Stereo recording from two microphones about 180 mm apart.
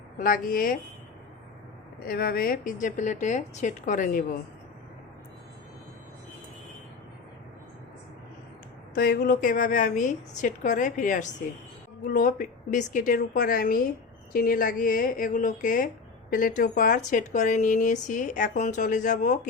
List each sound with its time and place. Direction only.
0.2 s speech: 50° left (ahead or behind)
2.0 s speech: 55° left (ahead or behind)
9.0 s speech: 55° left (ahead or behind)